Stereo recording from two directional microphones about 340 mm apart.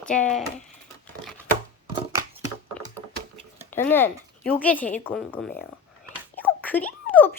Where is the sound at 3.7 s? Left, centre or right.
Centre.